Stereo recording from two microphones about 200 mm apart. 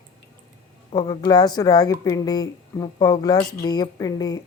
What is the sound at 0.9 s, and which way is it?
Speech, 20° left (ahead or behind).